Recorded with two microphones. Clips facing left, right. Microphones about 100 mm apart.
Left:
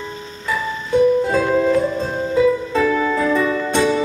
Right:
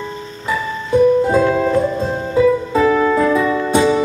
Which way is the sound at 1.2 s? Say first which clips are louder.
Right 2 dB; 15° right (ahead or behind).